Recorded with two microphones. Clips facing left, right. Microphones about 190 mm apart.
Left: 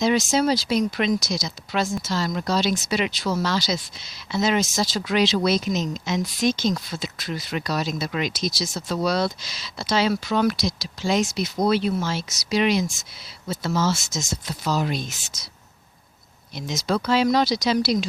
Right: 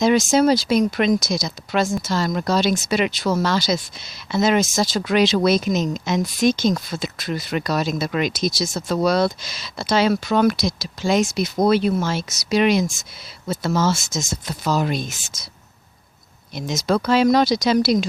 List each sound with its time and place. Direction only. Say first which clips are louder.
0.0 s speech: right 4 dB; 50° right (ahead or behind)
16.6 s speech: right 4 dB; 50° right (ahead or behind)